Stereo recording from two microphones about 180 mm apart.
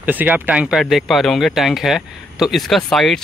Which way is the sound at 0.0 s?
10° right (ahead or behind).